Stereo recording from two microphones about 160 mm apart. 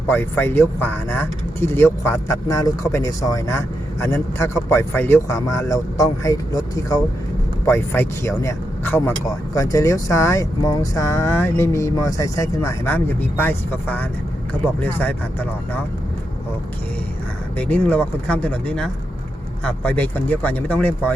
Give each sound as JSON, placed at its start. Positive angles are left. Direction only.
{"t": 0.1, "sound": "speech", "side_deg": 15}
{"t": 17.6, "sound": "speech", "side_deg": 10}